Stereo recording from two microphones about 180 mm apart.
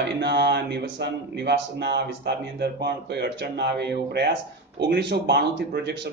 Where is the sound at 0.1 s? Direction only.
70° right (ahead or behind).